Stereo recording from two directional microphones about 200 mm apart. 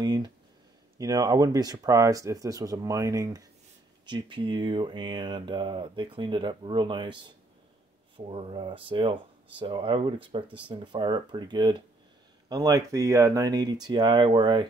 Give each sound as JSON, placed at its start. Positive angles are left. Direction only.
{"t": 0.0, "sound": "speech", "side_deg": -20}
{"t": 8.2, "sound": "speech", "side_deg": -30}